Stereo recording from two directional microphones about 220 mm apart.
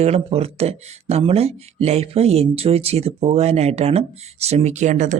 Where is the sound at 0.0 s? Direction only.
30° right (ahead or behind).